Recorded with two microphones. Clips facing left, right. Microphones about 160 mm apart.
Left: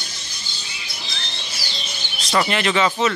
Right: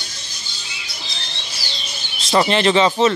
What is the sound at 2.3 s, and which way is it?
Speech, 30° right (ahead or behind).